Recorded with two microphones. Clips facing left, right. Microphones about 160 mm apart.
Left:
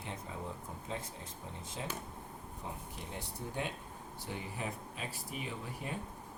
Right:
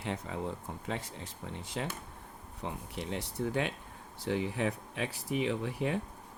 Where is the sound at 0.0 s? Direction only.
80° right.